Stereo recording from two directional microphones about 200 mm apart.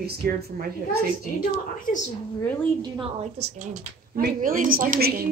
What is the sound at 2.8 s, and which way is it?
A woman's voice, 30° right (ahead or behind).